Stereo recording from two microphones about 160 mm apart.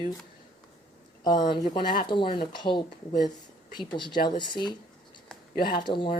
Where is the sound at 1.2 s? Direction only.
25° left (ahead or behind).